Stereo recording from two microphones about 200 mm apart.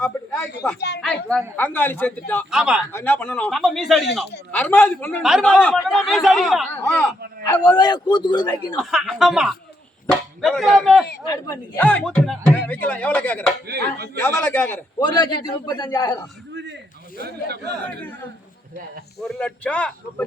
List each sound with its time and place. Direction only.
0.8 s speech: 55° left (ahead or behind)
1.0 s speech: 5° left (ahead or behind)
2.5 s a man's voice: 5° right (ahead or behind)
2.9 s a man's voice: 10° left (ahead or behind)
6.7 s speech: 10° left (ahead or behind)
7.8 s a man's voice: 20° left (ahead or behind)
8.8 s a man's voice: centre (ahead or behind)
11.3 s speech: 10° left (ahead or behind)
13.7 s speech: 55° right (ahead or behind)
14.2 s speech: 10° left (ahead or behind)
15.0 s a man's voice: 20° left (ahead or behind)
19.2 s a man's voice: 5° left (ahead or behind)